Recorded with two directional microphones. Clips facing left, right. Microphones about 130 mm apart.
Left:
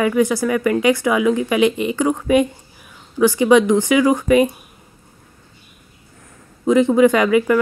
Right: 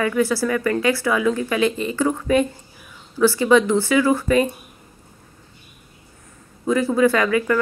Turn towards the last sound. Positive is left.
turn(degrees=15)  # may be behind; listen again after turning